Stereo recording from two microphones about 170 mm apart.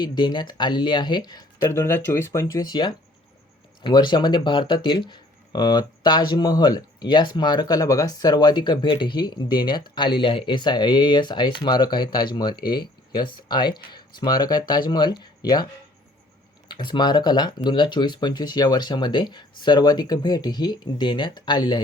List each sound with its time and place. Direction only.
0.0 s speech: 25° left (ahead or behind)
16.6 s speech: 25° left (ahead or behind)